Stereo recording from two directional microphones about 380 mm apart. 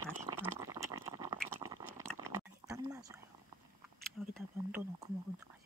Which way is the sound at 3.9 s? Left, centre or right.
Centre.